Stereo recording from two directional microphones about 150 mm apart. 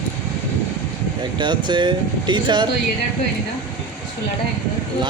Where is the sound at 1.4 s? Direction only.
30° right (ahead or behind).